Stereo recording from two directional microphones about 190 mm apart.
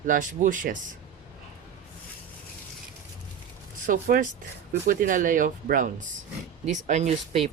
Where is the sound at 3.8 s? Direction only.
45° right (ahead or behind).